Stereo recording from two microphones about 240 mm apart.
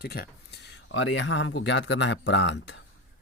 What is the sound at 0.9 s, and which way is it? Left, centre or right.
Speech, left.